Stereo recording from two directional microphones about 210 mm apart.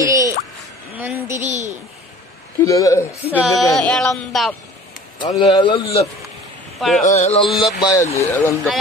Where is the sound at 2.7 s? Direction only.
15° left (ahead or behind).